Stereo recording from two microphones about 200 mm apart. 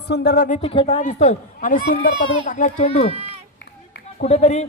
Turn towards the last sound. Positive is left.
turn(degrees=35)  # may be behind; listen again after turning